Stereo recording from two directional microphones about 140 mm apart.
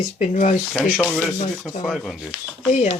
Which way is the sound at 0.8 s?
10° left (ahead or behind).